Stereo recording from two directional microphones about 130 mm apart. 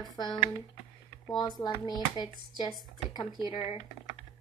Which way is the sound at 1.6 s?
35° left (ahead or behind).